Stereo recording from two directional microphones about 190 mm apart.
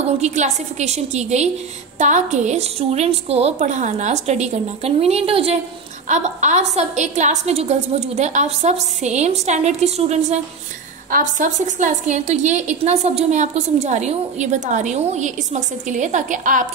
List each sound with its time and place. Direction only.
0.0 s a woman's voice: 40° right (ahead or behind)